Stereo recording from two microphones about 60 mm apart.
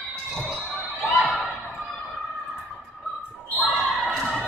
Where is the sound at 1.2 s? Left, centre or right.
Centre.